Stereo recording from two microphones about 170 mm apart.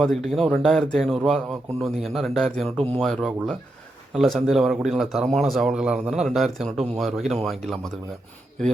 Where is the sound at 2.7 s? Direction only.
35° right (ahead or behind).